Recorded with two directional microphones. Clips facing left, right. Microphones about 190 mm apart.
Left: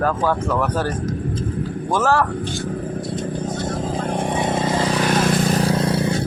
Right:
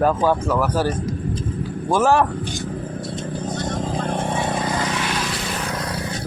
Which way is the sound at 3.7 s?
10° left (ahead or behind).